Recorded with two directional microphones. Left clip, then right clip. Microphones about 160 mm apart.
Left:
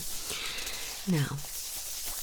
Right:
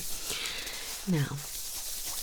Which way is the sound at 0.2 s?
5° right (ahead or behind).